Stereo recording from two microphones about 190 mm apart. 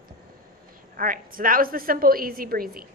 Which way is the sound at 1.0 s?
45° right (ahead or behind).